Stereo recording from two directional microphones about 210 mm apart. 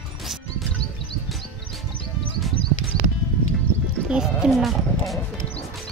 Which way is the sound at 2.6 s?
50° left (ahead or behind).